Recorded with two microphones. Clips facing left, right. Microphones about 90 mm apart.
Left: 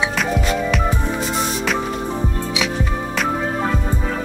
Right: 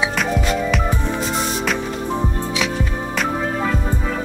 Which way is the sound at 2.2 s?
20° right (ahead or behind).